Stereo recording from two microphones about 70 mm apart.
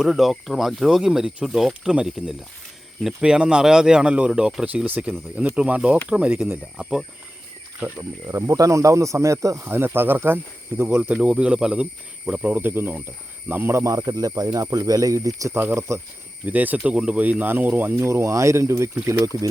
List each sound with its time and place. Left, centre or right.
0.0 s speech: centre
3.2 s speech: centre
4.9 s speech: right
7.9 s speech: right
9.6 s speech: right
13.8 s speech: right
15.5 s speech: right
16.5 s speech: right